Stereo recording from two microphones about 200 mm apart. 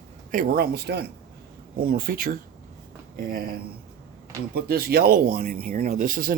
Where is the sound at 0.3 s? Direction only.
45° right (ahead or behind).